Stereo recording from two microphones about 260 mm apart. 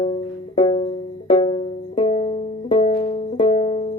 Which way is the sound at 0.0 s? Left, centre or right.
Left.